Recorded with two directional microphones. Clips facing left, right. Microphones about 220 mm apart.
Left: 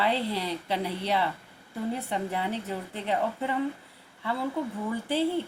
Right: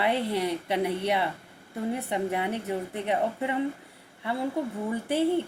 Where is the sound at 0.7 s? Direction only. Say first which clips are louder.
Right 5 dB; 60° right (ahead or behind).